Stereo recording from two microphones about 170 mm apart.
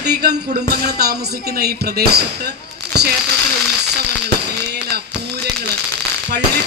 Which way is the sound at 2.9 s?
70° right (ahead or behind).